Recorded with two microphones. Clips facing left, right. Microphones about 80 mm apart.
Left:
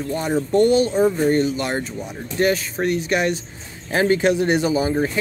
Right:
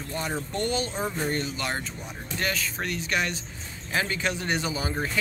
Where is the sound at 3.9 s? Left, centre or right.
Left.